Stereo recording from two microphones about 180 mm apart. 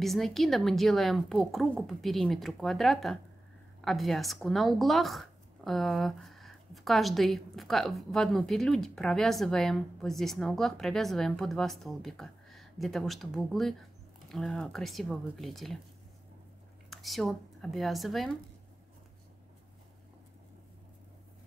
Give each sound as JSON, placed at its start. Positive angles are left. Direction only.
{"t": 0.0, "sound": "speech", "side_deg": 0}
{"t": 16.9, "sound": "speech", "side_deg": 0}